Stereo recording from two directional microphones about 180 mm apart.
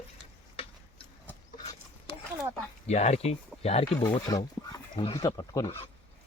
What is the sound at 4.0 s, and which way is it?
Speech, 20° left (ahead or behind).